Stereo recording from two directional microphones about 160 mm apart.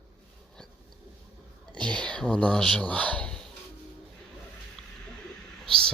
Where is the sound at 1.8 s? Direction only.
5° left (ahead or behind).